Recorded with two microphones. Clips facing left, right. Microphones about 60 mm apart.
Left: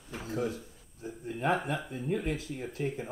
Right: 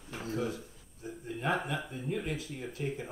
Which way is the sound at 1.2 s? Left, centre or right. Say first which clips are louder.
Left 3 dB; left.